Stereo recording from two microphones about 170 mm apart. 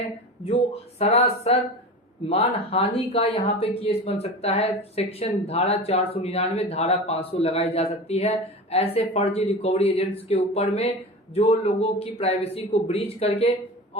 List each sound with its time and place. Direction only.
0.4 s speech: 35° left (ahead or behind)